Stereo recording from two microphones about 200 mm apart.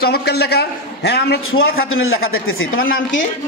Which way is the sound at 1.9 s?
90° left.